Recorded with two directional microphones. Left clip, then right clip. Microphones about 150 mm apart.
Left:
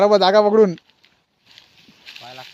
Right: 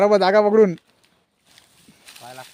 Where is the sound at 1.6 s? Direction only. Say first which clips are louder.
Left 4 dB; 5° right (ahead or behind).